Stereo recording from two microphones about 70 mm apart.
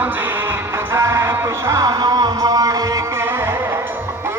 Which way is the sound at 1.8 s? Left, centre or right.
Right.